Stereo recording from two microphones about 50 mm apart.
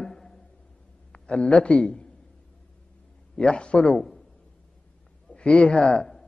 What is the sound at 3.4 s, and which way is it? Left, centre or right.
Speech, centre.